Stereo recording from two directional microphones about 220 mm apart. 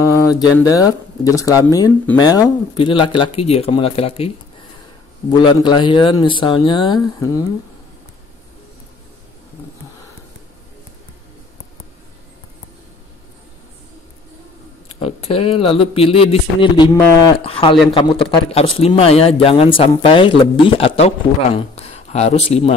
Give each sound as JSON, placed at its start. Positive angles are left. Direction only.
{"t": 0.0, "sound": "a sound", "side_deg": 15}
{"t": 0.4, "sound": "speech", "side_deg": 15}
{"t": 5.3, "sound": "speech", "side_deg": 20}
{"t": 15.0, "sound": "speech", "side_deg": 25}